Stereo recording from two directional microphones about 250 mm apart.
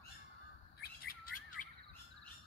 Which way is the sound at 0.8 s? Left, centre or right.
Left.